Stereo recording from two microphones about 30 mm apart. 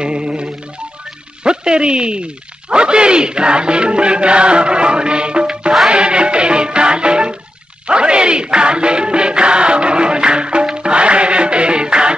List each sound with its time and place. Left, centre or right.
0.0 s music: right
1.4 s a sound: right
2.7 s music: right